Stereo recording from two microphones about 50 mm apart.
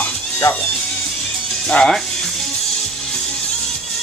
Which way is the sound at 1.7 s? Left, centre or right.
Centre.